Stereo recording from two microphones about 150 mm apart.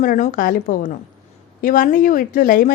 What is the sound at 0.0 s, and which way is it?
Speech, 65° left (ahead or behind).